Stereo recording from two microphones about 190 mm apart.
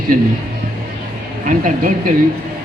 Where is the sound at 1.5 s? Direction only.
45° right (ahead or behind).